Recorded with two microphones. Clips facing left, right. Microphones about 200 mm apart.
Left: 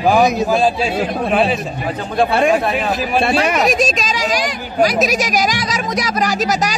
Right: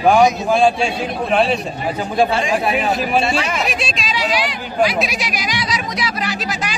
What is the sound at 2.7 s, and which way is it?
Speech, 5° right (ahead or behind).